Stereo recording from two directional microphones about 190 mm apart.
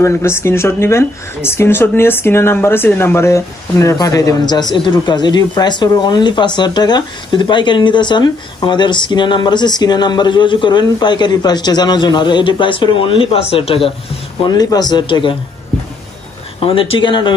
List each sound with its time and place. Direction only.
0.0 s speech: 15° left (ahead or behind)
16.5 s speech: 30° left (ahead or behind)